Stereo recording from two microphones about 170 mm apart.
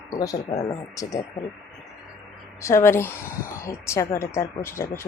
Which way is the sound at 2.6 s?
15° left (ahead or behind).